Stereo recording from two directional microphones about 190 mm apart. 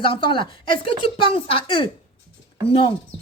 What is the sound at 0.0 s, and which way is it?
A woman's voice, 25° left (ahead or behind).